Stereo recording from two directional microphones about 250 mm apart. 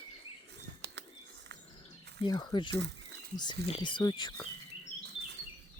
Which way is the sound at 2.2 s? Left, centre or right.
Centre.